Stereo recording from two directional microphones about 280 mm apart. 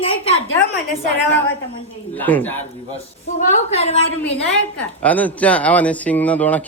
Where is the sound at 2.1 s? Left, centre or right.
Centre.